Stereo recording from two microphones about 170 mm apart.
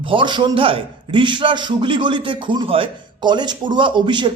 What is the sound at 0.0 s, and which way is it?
A man's voice, 30° right (ahead or behind).